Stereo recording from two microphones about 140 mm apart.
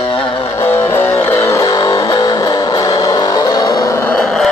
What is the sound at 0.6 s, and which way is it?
Music, 15° left (ahead or behind).